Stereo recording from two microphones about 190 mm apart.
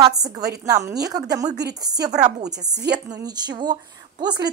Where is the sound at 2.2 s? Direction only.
40° right (ahead or behind).